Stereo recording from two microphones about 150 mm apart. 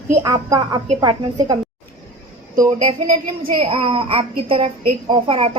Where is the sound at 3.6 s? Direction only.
40° right (ahead or behind).